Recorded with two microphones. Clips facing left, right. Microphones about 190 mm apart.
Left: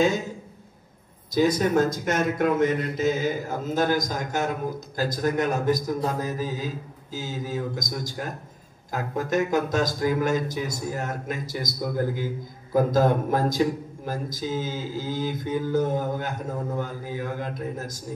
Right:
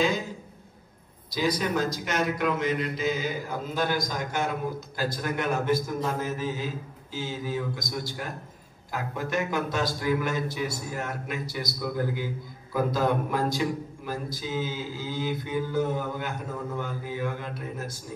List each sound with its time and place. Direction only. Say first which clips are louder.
1.3 s a man's voice: left 6 dB; 50° left (ahead or behind)